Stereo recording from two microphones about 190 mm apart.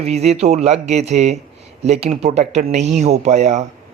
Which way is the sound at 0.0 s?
35° right (ahead or behind).